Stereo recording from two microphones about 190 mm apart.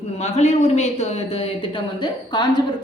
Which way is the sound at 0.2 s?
35° left (ahead or behind).